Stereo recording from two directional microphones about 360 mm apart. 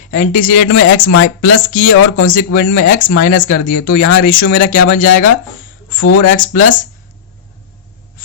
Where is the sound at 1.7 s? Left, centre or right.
Left.